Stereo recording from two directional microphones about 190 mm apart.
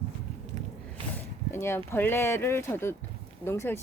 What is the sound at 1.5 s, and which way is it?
Speech, 15° left (ahead or behind).